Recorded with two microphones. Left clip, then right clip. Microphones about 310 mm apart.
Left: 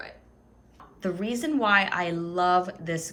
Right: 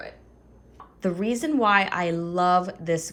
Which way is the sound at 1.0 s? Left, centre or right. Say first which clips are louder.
Right 3 dB; centre.